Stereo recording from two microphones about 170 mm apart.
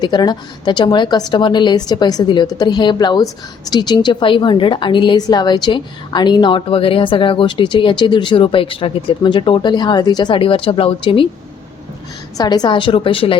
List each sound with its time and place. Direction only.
0.0 s a woman's voice: 25° left (ahead or behind)
12.4 s a woman's voice: 25° left (ahead or behind)